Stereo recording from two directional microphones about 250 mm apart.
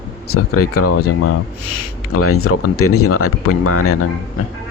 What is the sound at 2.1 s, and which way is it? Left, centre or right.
Speech, left.